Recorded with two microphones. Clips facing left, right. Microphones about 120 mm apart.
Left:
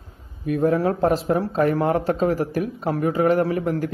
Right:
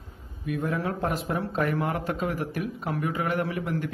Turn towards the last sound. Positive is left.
turn(degrees=35)  # may be behind; listen again after turning